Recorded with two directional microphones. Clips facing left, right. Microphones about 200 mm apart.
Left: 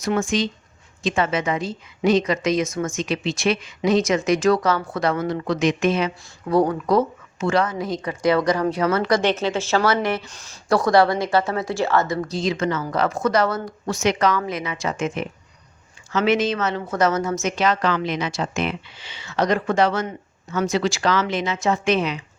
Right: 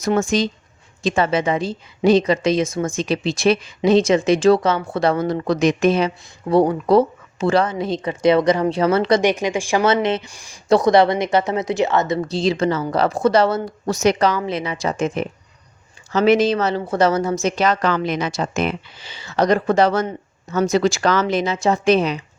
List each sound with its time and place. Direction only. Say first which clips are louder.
0.0 s speech: right 3 dB; 40° right (ahead or behind)
9.2 s a woman's voice: right 2 dB; 15° right (ahead or behind)
10.2 s speech: right 5 dB; 10° right (ahead or behind); by 22.2 s 35° right (ahead or behind)